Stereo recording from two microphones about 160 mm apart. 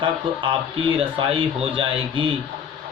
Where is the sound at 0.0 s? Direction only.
30° right (ahead or behind).